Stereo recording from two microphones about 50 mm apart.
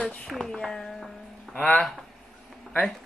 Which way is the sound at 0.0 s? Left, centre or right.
Left.